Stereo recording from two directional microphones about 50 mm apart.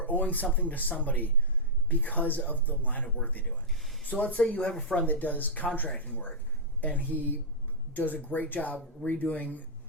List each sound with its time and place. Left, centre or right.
0.0 s speech: left
3.8 s a sound: centre
4.0 s speech: left
4.7 s speech: centre
5.0 s speech: left